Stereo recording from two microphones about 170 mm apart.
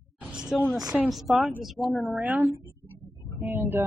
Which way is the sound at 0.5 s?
Centre (ahead or behind).